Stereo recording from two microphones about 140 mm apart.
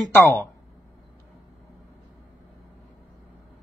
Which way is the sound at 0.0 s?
20° left (ahead or behind).